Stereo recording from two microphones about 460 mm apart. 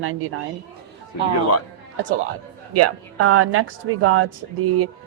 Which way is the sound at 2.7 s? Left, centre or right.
Right.